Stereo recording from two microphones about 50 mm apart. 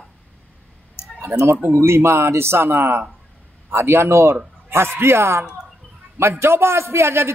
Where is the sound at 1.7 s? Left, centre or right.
Right.